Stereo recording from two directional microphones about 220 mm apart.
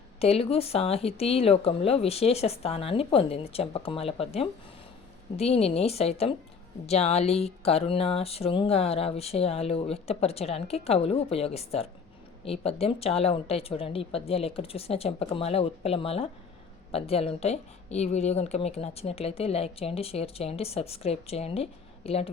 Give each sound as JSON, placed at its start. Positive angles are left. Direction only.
{"t": 0.2, "sound": "a woman's voice", "side_deg": 25}